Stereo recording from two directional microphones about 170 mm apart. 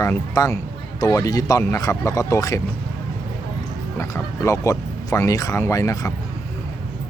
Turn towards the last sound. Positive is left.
turn(degrees=20)  # may be behind; listen again after turning